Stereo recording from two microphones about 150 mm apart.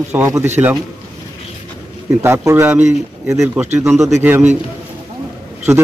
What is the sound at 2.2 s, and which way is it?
Speech, 15° right (ahead or behind).